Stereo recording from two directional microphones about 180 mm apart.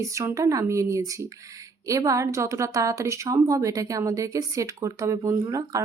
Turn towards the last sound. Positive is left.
turn(degrees=-20)  # may be behind; listen again after turning